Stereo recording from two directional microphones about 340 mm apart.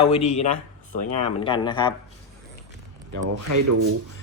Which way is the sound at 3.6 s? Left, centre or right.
Right.